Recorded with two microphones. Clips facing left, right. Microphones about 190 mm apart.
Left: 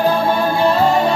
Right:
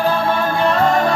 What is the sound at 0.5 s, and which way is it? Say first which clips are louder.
Music: left 2 dB; 30° left (ahead or behind).